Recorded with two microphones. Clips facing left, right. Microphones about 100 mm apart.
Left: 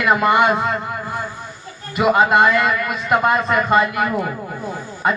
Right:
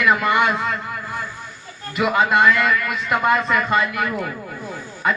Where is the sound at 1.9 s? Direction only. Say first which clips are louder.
Left 3 dB; 20° left (ahead or behind).